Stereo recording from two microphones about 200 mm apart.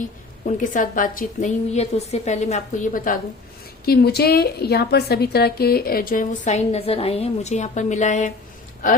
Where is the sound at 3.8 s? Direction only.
50° left (ahead or behind).